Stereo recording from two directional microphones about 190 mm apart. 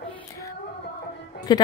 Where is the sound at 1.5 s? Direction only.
20° left (ahead or behind).